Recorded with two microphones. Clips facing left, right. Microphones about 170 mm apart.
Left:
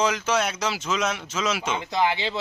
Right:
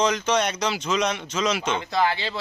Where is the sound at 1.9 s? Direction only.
15° left (ahead or behind).